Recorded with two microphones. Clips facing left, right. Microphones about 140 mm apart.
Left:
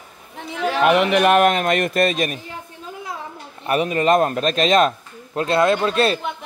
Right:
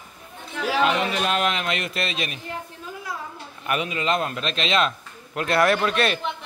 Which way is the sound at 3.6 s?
40° left (ahead or behind).